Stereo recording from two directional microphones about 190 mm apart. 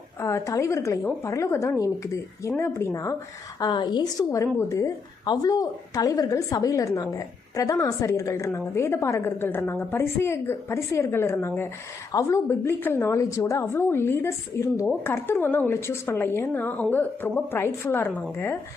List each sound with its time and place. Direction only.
0.2 s a woman's voice: 15° left (ahead or behind)